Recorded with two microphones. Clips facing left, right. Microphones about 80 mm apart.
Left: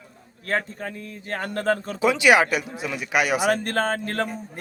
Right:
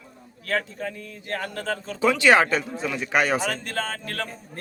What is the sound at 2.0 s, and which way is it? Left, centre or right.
Speech, centre.